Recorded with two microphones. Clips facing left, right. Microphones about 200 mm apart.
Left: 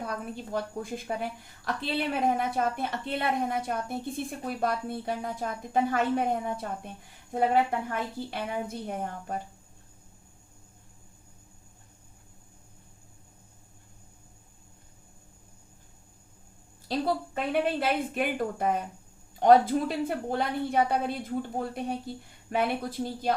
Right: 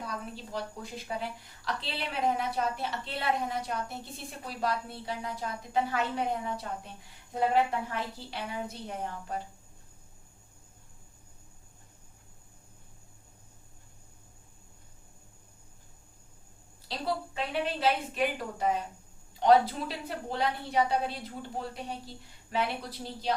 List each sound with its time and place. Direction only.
0.5 s a woman's voice: 50° left (ahead or behind)
16.9 s a woman's voice: 50° left (ahead or behind)